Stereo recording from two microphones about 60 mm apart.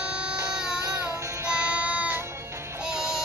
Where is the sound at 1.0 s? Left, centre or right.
Right.